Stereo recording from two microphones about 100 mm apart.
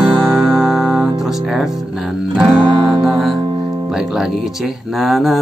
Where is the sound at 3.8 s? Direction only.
5° right (ahead or behind).